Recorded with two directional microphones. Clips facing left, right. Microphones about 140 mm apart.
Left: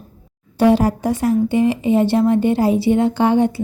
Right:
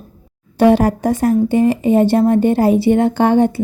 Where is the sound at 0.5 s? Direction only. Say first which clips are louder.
Right 3 dB; 60° right (ahead or behind).